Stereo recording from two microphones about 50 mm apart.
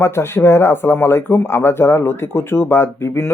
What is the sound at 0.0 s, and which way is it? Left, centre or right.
Speech, left.